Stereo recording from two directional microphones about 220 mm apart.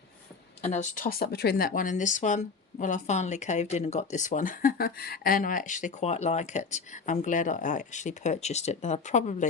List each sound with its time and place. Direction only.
0.6 s speech: 35° left (ahead or behind)